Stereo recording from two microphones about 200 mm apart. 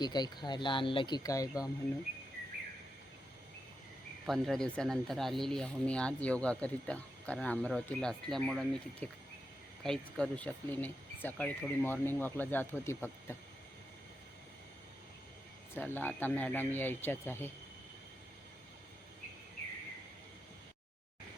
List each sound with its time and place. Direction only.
0.0 s speech: 20° left (ahead or behind)
4.3 s speech: centre (ahead or behind)
15.7 s speech: 10° left (ahead or behind)